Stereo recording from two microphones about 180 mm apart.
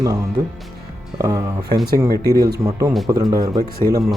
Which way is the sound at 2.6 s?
15° right (ahead or behind).